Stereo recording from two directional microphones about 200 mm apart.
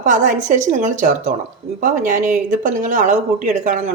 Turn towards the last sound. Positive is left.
turn(degrees=-35)  # may be behind; listen again after turning